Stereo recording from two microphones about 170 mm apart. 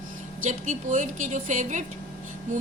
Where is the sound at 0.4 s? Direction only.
50° right (ahead or behind).